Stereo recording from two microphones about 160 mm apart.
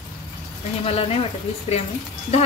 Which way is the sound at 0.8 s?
40° left (ahead or behind).